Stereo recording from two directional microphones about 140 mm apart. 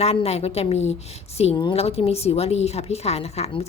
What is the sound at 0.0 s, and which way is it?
A woman's voice, 45° left (ahead or behind).